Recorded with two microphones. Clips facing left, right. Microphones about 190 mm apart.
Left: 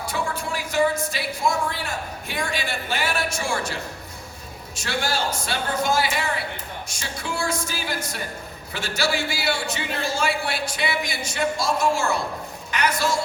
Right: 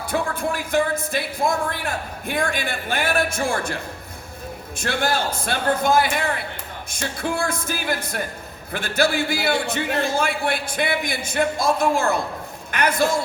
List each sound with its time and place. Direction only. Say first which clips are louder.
0.1 s speech: right 6 dB; 55° right (ahead or behind)
4.8 s a man's voice: right 3 dB; 55° right (ahead or behind)